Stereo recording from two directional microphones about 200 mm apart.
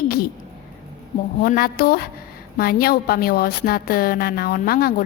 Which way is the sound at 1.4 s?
45° left (ahead or behind).